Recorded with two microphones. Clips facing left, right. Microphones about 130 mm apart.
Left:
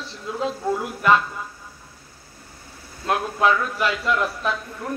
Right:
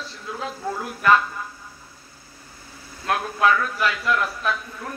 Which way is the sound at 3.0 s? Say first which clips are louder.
Even; 20° left (ahead or behind).